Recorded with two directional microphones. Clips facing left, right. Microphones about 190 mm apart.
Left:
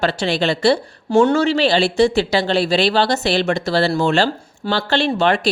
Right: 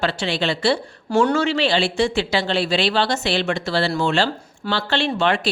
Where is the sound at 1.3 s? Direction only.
35° left (ahead or behind).